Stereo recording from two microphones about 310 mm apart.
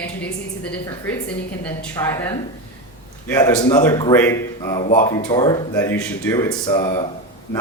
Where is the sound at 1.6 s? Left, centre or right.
Centre.